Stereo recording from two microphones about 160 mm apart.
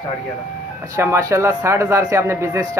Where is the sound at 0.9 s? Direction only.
20° right (ahead or behind).